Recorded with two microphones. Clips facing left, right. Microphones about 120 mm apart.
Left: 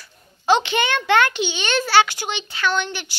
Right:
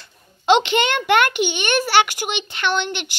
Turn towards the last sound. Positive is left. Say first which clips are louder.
# right 1 dB
turn(degrees=-20)  # may be behind; listen again after turning